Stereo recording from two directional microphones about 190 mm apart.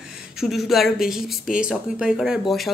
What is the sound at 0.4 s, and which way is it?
A woman's voice, centre (ahead or behind).